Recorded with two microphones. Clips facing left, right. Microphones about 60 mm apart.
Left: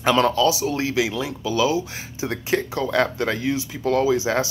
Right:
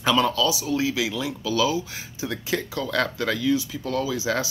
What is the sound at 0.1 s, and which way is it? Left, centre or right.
Speech, left.